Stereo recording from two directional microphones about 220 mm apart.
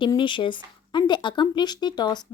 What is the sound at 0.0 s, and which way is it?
Speech, 20° left (ahead or behind).